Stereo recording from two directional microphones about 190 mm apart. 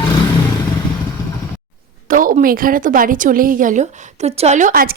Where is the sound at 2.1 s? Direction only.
45° right (ahead or behind).